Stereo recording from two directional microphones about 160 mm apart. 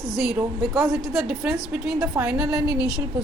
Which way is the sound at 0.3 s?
Centre (ahead or behind).